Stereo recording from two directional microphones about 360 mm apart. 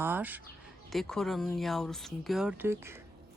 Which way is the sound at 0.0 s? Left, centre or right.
Centre.